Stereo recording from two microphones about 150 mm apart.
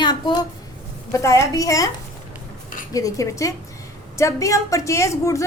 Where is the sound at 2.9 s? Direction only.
25° left (ahead or behind).